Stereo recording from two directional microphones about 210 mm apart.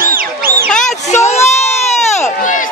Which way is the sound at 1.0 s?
30° left (ahead or behind).